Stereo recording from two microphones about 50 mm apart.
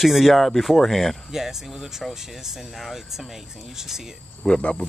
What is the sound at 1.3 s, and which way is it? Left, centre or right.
Speech, centre.